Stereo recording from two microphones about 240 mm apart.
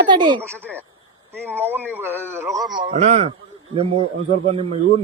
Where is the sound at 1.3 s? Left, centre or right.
Centre.